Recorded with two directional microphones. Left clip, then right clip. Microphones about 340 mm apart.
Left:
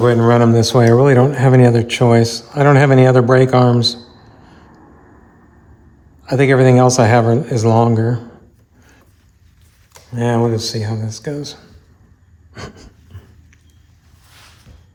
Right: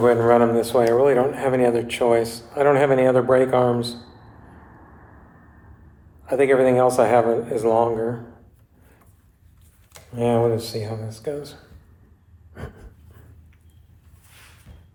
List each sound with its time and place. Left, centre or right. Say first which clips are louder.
0.0 s a man's voice: left 3 dB; left
6.2 s speech: left 4 dB; left
10.2 s speech: left 2 dB; left
14.3 s a sound: left 5 dB; left